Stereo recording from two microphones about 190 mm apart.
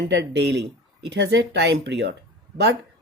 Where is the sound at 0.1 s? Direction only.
65° right (ahead or behind).